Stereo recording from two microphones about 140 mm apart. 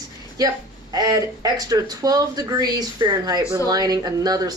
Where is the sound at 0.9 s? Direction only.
25° right (ahead or behind).